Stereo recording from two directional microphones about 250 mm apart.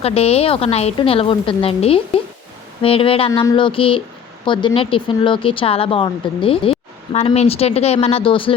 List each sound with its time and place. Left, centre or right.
0.0 s speech: left